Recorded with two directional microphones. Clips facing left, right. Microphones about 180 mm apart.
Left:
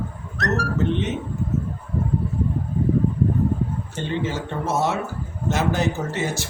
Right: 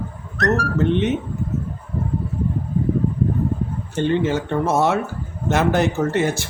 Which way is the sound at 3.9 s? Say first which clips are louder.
Right 10 dB; 55° right (ahead or behind).